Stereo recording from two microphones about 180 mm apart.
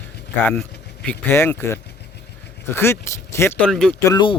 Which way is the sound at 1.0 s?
10° left (ahead or behind).